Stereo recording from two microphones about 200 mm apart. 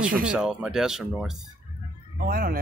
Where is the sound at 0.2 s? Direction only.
5° right (ahead or behind).